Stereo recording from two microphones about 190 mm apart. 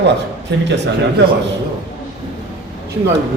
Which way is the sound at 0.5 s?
65° right (ahead or behind).